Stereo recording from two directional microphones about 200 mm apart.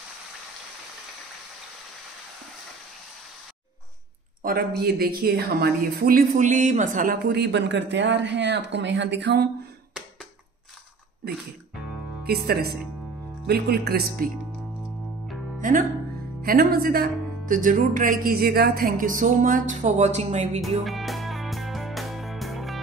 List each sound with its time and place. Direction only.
4.4 s speech: 50° right (ahead or behind)
12.3 s speech: 50° right (ahead or behind)
14.8 s music: centre (ahead or behind)
15.6 s speech: 40° right (ahead or behind)
20.8 s music: centre (ahead or behind)